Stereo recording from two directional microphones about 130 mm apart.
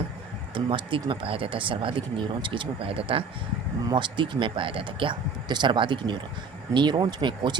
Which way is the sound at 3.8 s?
35° right (ahead or behind).